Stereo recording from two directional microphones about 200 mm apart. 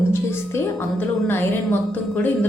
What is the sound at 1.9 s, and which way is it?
Speech, 10° left (ahead or behind).